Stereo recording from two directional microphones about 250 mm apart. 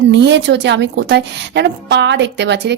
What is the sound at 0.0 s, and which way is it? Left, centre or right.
A woman's voice, right.